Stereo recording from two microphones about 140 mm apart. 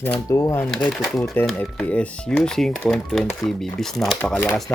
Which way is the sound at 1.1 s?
Centre (ahead or behind).